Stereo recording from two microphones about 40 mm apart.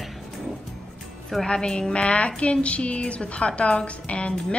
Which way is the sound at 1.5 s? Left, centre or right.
Left.